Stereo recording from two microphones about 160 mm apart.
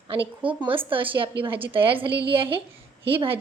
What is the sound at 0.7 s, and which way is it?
A woman's voice, 35° right (ahead or behind).